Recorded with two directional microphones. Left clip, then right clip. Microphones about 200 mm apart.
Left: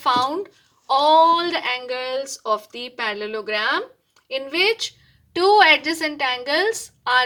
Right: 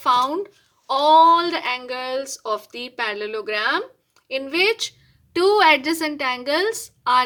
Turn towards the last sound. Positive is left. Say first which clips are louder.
# right 1 dB
turn(degrees=-20)  # may be behind; listen again after turning